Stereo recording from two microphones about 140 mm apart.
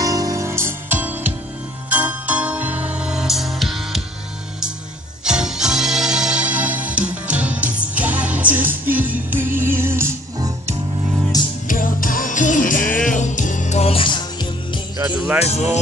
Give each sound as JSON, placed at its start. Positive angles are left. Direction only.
{"t": 0.0, "sound": "music", "side_deg": -25}
{"t": 5.2, "sound": "music", "side_deg": -5}
{"t": 11.6, "sound": "music", "side_deg": 80}
{"t": 15.3, "sound": "speech", "side_deg": 50}